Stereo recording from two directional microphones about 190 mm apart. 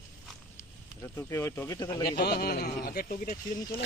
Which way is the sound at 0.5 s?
15° left (ahead or behind).